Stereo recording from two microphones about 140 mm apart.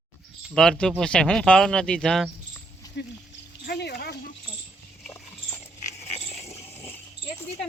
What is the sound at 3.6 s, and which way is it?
Speech, 90° left.